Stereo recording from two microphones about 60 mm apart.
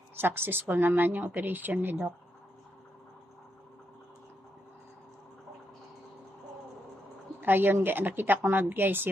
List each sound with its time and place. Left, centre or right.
0.2 s a woman's voice: right
7.4 s a woman's voice: right